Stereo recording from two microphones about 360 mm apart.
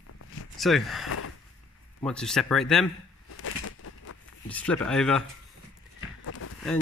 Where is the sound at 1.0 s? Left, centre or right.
Left.